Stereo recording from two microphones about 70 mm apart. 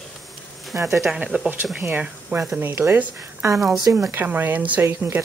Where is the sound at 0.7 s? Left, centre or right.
Right.